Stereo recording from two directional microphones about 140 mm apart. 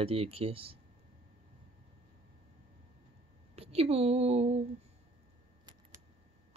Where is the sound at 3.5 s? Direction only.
45° right (ahead or behind).